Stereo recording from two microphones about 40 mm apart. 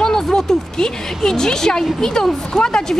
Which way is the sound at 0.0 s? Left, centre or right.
Centre.